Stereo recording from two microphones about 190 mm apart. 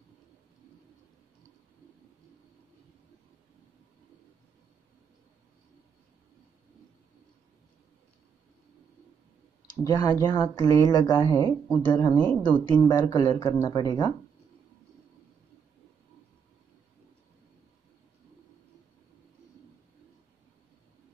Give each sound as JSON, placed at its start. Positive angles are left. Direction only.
{"t": 9.8, "sound": "speech", "side_deg": 20}
{"t": 12.2, "sound": "a woman's voice", "side_deg": 10}
{"t": 12.6, "sound": "speech", "side_deg": 25}